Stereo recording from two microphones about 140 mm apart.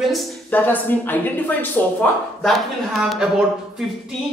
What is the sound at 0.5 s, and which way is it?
Speech, 10° left (ahead or behind).